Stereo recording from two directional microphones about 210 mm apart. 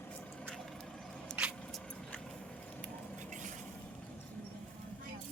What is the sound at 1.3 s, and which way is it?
Vehicle, 5° right (ahead or behind).